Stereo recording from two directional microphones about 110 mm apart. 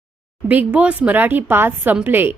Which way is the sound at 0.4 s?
15° right (ahead or behind).